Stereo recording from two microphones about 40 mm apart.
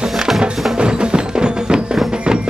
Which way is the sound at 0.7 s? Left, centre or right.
Right.